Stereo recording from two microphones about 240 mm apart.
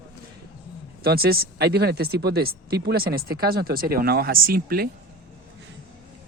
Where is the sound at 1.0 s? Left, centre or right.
Right.